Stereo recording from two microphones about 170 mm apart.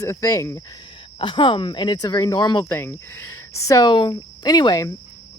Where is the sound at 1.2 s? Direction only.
30° left (ahead or behind).